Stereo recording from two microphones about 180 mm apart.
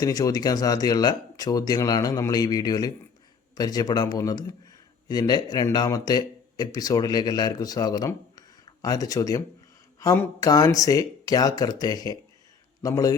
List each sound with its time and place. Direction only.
0.0 s speech: 20° left (ahead or behind)